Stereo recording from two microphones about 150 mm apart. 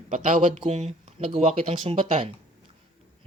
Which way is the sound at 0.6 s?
45° right (ahead or behind).